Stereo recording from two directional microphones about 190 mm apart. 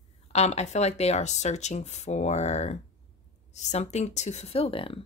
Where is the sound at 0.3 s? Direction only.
35° left (ahead or behind).